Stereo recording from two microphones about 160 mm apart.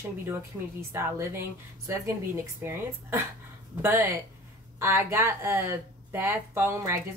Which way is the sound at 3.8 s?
15° right (ahead or behind).